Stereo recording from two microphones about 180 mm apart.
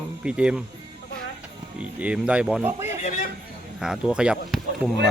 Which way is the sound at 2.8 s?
40° left (ahead or behind).